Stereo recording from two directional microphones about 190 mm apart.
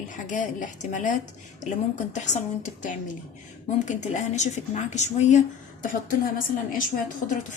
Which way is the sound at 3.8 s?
40° left (ahead or behind).